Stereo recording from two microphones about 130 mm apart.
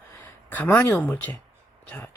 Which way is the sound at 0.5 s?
15° left (ahead or behind).